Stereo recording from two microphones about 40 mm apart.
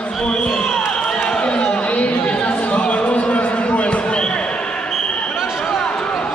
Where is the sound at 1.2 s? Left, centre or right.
Left.